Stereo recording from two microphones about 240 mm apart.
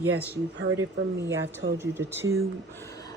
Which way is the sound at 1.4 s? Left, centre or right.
Right.